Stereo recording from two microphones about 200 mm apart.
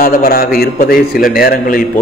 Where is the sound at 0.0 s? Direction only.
45° left (ahead or behind).